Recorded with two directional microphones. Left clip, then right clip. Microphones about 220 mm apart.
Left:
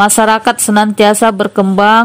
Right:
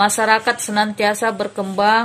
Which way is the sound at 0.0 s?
45° left (ahead or behind).